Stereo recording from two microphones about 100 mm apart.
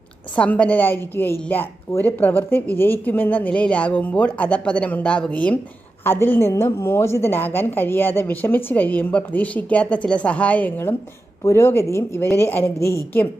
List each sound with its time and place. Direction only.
0.3 s a woman's voice: 15° left (ahead or behind)